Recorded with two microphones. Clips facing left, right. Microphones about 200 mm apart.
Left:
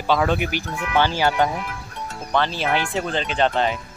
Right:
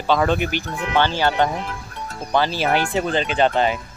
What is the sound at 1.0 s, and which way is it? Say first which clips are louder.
Speech: even; 10° left (ahead or behind).